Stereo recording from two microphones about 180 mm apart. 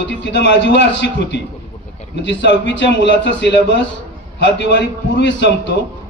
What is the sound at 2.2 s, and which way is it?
Speech, 85° left.